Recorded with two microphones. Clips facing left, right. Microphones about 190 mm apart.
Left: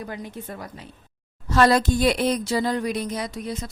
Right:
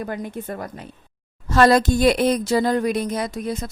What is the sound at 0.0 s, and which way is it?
Speech, 50° right (ahead or behind).